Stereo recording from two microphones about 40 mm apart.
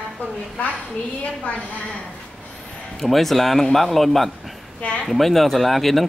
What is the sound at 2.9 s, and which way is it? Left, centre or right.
Speech, centre.